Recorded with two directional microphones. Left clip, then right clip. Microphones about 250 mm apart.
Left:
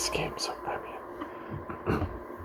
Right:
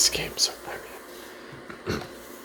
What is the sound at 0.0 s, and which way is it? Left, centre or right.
Speech, centre.